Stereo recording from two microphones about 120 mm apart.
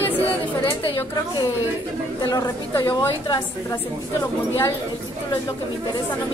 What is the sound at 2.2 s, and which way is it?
Speech, 30° left (ahead or behind).